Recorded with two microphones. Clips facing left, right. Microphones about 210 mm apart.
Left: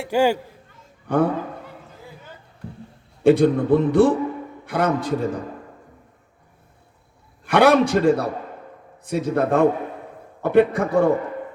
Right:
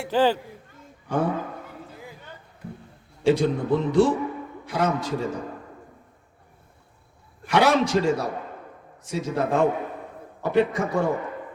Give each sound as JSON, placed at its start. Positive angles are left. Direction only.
{"t": 0.1, "sound": "speech", "side_deg": 10}
{"t": 1.0, "sound": "speech", "side_deg": 55}
{"t": 3.2, "sound": "a man's voice", "side_deg": 55}
{"t": 7.4, "sound": "a man's voice", "side_deg": 55}